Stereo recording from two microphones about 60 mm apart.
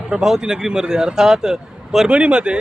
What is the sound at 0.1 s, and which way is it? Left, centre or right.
Speech, centre.